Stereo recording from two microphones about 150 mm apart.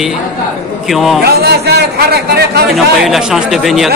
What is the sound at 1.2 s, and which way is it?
A man's voice, 90° right.